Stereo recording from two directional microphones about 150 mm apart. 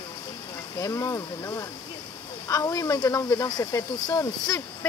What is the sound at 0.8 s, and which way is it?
Speech, 20° left (ahead or behind).